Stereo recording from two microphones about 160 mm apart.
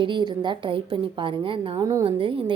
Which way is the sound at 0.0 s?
30° right (ahead or behind).